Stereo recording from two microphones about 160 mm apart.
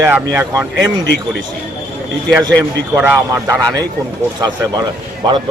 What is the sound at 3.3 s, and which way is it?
Speech, 20° right (ahead or behind).